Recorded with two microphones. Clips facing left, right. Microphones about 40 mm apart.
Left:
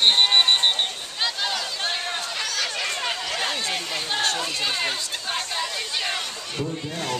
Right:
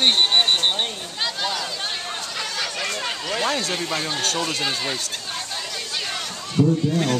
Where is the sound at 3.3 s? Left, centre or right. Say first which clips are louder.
Right 3 dB; centre.